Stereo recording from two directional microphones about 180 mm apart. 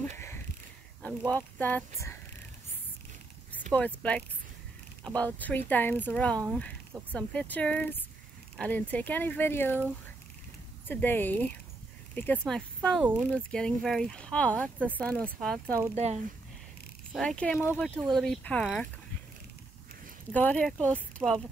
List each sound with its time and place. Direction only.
1.3 s speech: 10° left (ahead or behind)
3.7 s speech: 5° left (ahead or behind)
10.9 s speech: 10° left (ahead or behind)
15.9 s speech: 35° right (ahead or behind)
17.1 s speech: 5° left (ahead or behind)
20.3 s speech: 10° left (ahead or behind)